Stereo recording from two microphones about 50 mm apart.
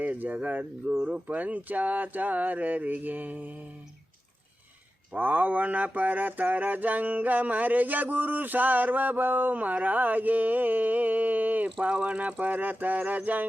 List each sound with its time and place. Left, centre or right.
0.0 s mantra: right
5.1 s mantra: right